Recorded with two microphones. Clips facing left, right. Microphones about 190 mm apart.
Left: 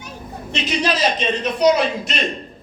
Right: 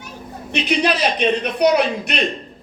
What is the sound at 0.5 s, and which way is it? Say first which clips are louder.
A man's voice: right 3 dB; 60° right (ahead or behind).